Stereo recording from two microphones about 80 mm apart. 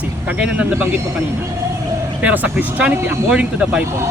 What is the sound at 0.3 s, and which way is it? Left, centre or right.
Speech, centre.